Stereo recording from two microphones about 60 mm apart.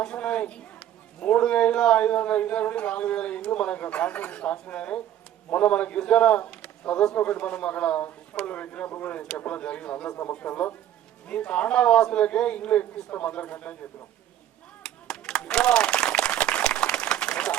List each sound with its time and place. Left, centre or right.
0.0 s a man's voice: centre
14.8 s applause: centre